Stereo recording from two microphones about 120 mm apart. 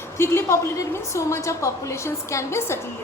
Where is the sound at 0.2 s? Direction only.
20° left (ahead or behind).